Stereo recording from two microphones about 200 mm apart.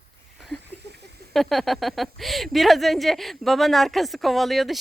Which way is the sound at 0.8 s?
55° right (ahead or behind).